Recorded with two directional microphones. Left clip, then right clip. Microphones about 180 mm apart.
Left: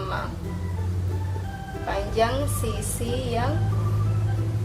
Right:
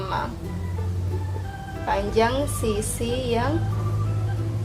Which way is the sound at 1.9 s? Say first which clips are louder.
Right 3 dB; 45° right (ahead or behind).